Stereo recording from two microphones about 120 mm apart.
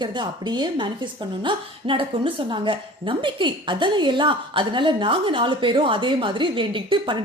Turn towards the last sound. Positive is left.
turn(degrees=-40)  # may be behind; listen again after turning